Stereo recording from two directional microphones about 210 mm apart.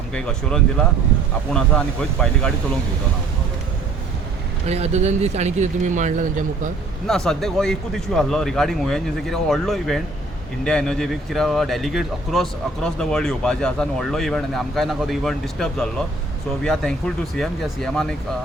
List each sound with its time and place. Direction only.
0.1 s speech: 5° left (ahead or behind)
4.6 s speech: 30° right (ahead or behind)
7.1 s speech: centre (ahead or behind)
17.3 s speech: centre (ahead or behind)